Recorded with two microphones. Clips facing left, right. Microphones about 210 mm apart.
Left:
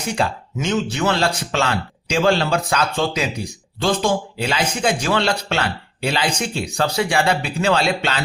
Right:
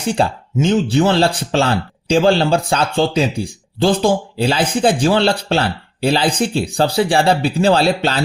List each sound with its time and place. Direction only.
0.0 s speech: 30° right (ahead or behind)